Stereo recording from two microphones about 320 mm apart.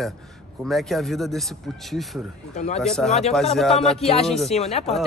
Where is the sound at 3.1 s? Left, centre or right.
Centre.